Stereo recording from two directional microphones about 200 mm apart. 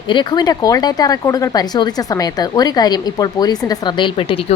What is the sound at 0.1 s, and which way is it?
Speech, 25° left (ahead or behind).